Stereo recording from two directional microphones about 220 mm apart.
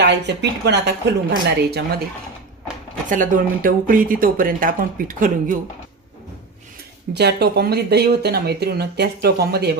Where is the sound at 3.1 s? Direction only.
35° right (ahead or behind).